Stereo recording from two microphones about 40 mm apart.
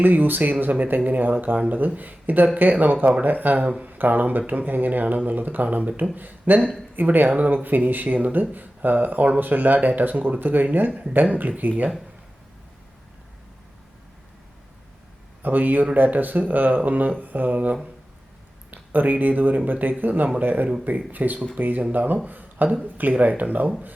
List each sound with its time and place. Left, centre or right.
0.0 s speech: right
15.4 s speech: right
22.3 s a sound: right
23.1 s speech: right